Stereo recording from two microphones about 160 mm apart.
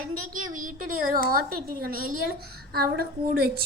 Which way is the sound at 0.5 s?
60° right (ahead or behind).